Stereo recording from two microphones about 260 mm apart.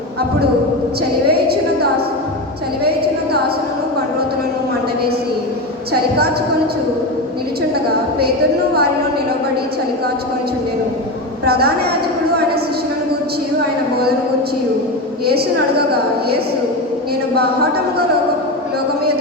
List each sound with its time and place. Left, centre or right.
11.4 s a woman's voice: right